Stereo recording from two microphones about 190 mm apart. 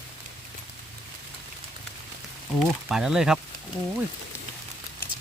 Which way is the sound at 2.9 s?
5° right (ahead or behind).